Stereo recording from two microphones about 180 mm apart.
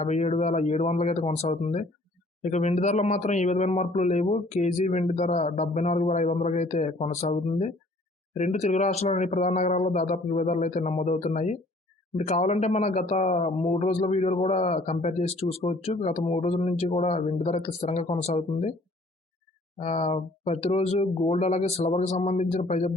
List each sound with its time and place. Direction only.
0.0 s a man's voice: 40° left (ahead or behind)
19.8 s a man's voice: 35° left (ahead or behind)